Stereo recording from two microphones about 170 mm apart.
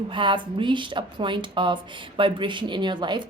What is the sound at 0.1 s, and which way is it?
Speech, 30° right (ahead or behind).